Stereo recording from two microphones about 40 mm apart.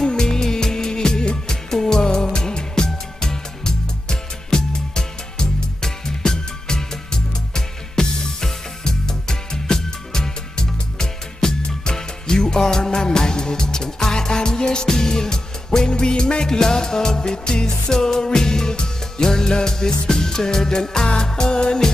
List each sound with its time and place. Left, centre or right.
0.0 s music: centre